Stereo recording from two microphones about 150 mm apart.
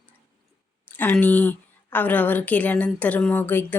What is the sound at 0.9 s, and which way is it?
A woman's voice, 10° left (ahead or behind).